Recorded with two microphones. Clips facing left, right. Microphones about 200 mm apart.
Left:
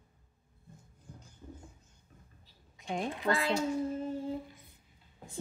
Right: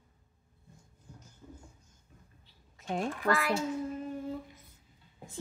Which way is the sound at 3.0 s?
20° left (ahead or behind).